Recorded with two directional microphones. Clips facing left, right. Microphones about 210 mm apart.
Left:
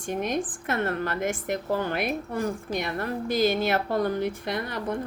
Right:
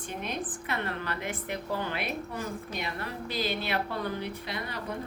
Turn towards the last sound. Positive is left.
turn(degrees=50)  # may be behind; listen again after turning